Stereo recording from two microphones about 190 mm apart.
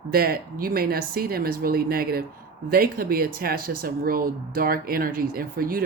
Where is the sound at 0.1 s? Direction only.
50° right (ahead or behind).